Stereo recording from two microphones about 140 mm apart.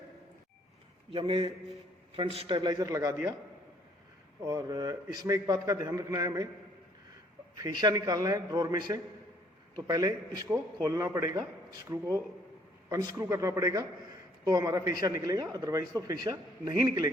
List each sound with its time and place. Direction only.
1.1 s a man's voice: 40° right (ahead or behind)
4.4 s speech: 25° right (ahead or behind)
7.5 s speech: 30° right (ahead or behind)